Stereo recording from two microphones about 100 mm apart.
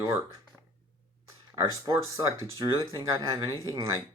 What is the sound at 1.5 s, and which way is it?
Speech, 35° right (ahead or behind).